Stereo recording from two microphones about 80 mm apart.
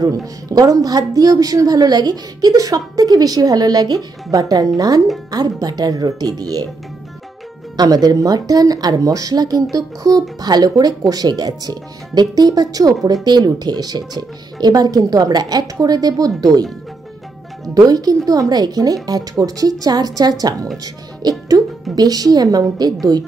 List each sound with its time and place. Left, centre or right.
0.5 s speech: right
7.7 s speech: right
17.7 s speech: right